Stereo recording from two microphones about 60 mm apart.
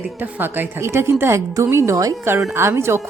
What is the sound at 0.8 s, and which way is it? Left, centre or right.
A woman's voice, right.